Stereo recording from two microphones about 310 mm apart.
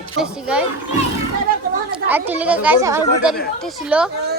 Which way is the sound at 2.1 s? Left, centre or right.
Centre.